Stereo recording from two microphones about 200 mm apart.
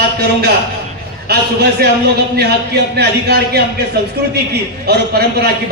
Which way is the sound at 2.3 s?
55° right (ahead or behind).